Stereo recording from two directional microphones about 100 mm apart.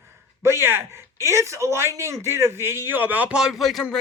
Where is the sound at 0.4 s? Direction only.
25° right (ahead or behind).